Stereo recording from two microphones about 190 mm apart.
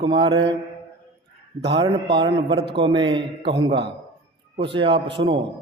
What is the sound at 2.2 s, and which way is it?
A man's voice, 25° right (ahead or behind).